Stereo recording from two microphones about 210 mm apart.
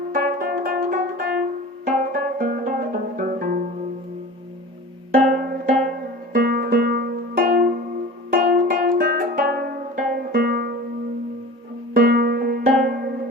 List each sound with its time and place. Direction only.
0.1 s music: 45° right (ahead or behind)
5.1 s music: 40° right (ahead or behind)
11.9 s music: 45° right (ahead or behind)